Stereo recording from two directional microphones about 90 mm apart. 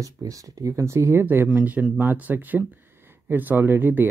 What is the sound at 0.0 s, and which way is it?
Speech, 40° right (ahead or behind).